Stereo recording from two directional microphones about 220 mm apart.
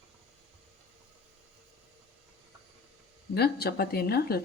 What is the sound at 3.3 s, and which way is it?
Speech, 45° left (ahead or behind).